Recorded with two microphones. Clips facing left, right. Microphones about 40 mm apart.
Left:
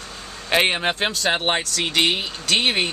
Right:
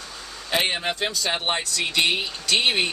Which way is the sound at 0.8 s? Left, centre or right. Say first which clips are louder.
Left 3 dB; left.